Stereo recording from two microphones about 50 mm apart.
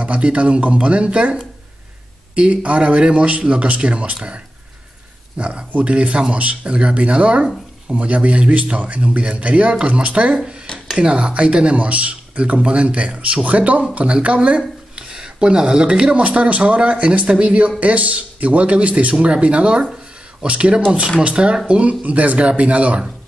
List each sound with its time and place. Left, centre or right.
0.0 s speech: right
5.4 s speech: right